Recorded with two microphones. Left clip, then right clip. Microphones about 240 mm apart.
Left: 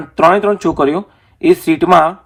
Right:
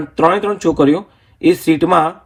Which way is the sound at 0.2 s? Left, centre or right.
Left.